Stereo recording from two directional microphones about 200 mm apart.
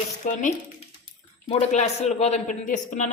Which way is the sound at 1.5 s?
35° left (ahead or behind).